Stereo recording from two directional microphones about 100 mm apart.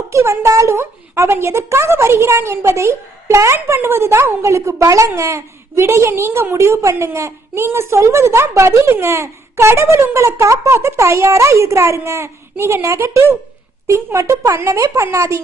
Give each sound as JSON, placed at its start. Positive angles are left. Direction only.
{"t": 0.1, "sound": "speech", "side_deg": -30}